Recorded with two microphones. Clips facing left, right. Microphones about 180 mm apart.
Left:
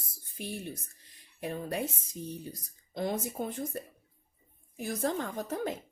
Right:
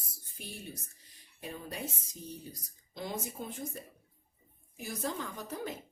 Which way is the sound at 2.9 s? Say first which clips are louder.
Left 6 dB; 55° left (ahead or behind).